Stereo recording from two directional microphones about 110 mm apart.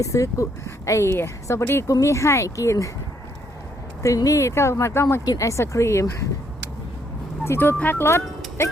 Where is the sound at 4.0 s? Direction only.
30° left (ahead or behind).